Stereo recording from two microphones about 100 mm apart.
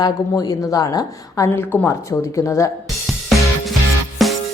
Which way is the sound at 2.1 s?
30° left (ahead or behind).